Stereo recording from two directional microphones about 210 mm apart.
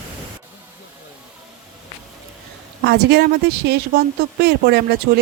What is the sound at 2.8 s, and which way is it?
Speech, 55° right (ahead or behind).